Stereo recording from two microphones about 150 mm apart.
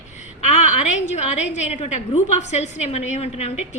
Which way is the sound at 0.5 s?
50° left (ahead or behind).